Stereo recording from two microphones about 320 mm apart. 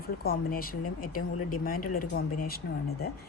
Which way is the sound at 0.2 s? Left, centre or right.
Left.